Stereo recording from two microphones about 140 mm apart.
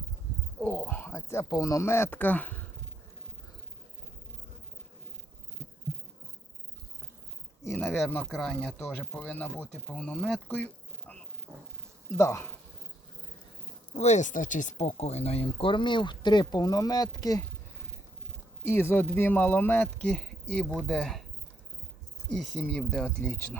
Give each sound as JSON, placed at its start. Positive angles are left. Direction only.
{"t": 0.6, "sound": "speech", "side_deg": 10}
{"t": 7.8, "sound": "speech", "side_deg": 0}
{"t": 13.9, "sound": "speech", "side_deg": 50}
{"t": 18.6, "sound": "speech", "side_deg": 15}
{"t": 22.3, "sound": "speech", "side_deg": 5}